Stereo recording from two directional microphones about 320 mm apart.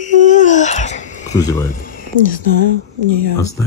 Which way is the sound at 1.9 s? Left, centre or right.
Left.